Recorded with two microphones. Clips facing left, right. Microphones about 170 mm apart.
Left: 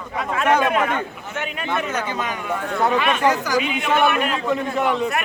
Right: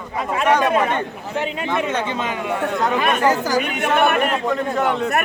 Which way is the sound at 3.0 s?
40° right (ahead or behind).